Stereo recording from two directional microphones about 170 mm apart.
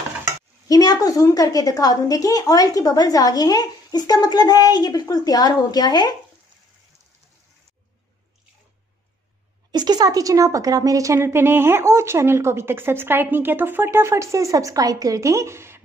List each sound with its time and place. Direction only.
0.7 s a woman's voice: 20° left (ahead or behind)
9.7 s a woman's voice: 25° right (ahead or behind)